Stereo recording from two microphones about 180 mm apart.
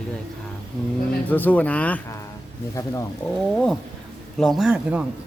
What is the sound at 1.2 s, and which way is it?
Speech, 10° left (ahead or behind).